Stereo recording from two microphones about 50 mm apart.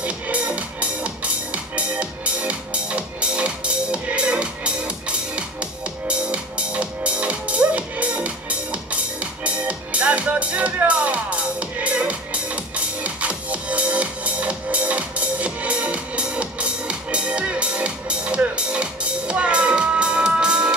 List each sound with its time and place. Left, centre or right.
0.0 s music: right